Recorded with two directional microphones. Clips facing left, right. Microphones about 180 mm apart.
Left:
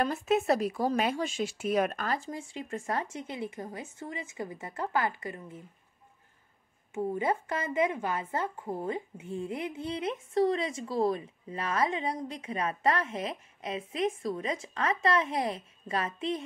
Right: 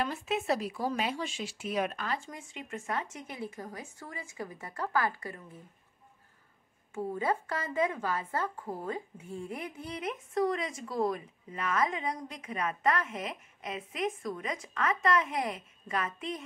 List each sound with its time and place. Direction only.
0.0 s speech: 45° left (ahead or behind); by 5.6 s 20° left (ahead or behind)
6.9 s a woman's voice: 20° left (ahead or behind)